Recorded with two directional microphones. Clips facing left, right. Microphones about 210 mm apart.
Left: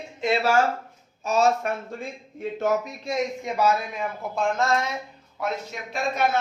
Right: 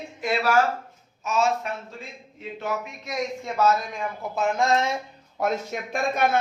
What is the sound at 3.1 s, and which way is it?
A woman's voice, 15° left (ahead or behind).